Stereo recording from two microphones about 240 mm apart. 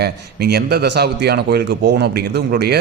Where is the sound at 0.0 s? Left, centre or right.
Right.